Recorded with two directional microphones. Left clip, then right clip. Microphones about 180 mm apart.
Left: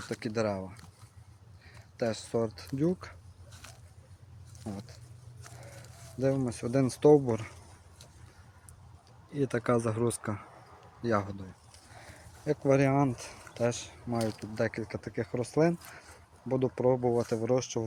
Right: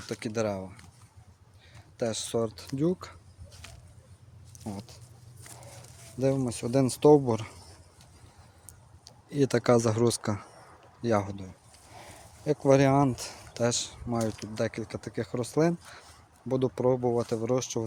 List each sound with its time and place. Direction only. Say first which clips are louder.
0.1 s speech: right 1 dB; 20° right (ahead or behind)
2.0 s speech: right 1 dB; 20° right (ahead or behind)
3.6 s a sound: right 2 dB; 10° left (ahead or behind)
4.6 s a sound: right 2 dB; 20° right (ahead or behind)
6.1 s speech: right 2 dB; 25° right (ahead or behind)
9.3 s speech: right 5 dB; 45° right (ahead or behind)
14.5 s speech: right 1 dB; 15° right (ahead or behind)